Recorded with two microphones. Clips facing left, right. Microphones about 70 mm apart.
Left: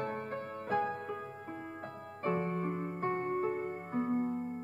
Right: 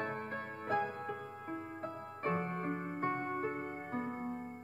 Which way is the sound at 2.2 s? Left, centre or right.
Right.